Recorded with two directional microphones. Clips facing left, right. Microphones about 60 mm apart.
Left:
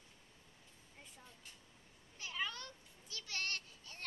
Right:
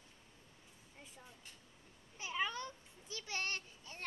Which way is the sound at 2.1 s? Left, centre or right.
Centre.